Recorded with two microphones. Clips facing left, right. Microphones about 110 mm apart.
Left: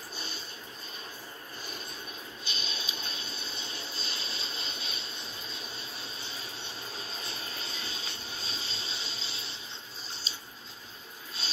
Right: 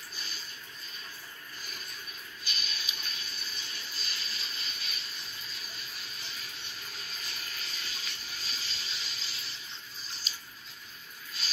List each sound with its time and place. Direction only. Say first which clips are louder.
0.1 s train: left 5 dB; 30° left (ahead or behind)
2.4 s water: left 1 dB; 30° left (ahead or behind)